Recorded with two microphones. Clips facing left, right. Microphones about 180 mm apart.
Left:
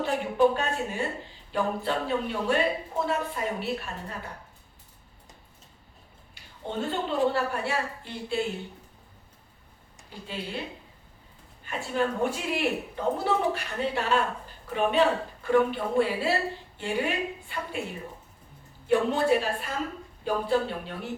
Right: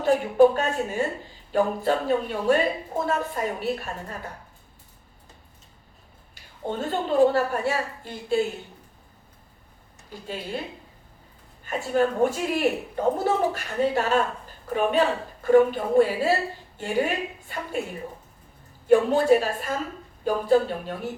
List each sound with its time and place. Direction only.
0.0 s speech: 45° right (ahead or behind)
6.6 s speech: 45° right (ahead or behind)
10.1 s speech: 45° right (ahead or behind)
11.6 s a woman's voice: 45° right (ahead or behind)
18.9 s speech: 45° right (ahead or behind)